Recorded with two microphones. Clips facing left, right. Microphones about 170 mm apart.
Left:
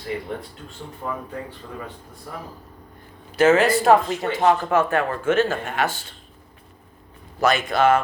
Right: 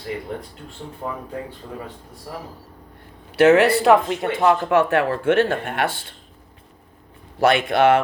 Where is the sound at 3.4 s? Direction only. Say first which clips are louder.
Right 3 dB; 65° right (ahead or behind).